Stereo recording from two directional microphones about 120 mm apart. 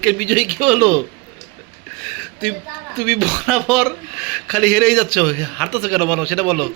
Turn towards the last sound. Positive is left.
turn(degrees=5)  # may be behind; listen again after turning